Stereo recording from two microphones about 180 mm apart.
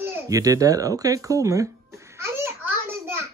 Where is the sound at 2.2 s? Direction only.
15° right (ahead or behind).